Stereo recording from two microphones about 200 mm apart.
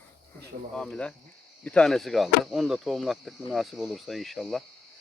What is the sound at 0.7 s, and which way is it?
Speech, 5° left (ahead or behind).